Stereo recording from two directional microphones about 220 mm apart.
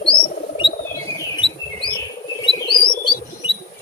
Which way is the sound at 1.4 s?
25° left (ahead or behind).